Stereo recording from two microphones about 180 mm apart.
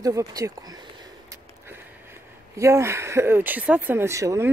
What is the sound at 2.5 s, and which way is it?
Speech, 15° right (ahead or behind).